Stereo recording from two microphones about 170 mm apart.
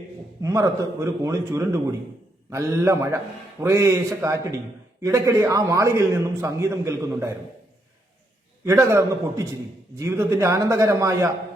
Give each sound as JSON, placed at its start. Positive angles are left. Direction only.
{"t": 0.4, "sound": "a man's voice", "side_deg": -20}
{"t": 8.6, "sound": "a man's voice", "side_deg": -15}